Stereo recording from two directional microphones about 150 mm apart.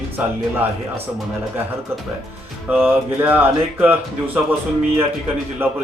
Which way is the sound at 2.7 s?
15° right (ahead or behind).